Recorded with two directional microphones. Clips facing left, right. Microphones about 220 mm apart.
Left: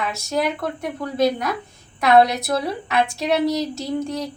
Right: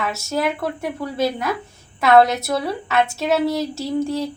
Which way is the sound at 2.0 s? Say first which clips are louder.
Right 1 dB; centre (ahead or behind).